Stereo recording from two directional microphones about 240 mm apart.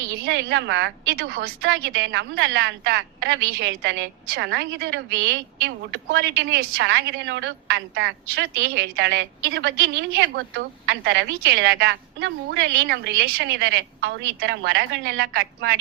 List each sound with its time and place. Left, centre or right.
0.3 s a woman's voice: right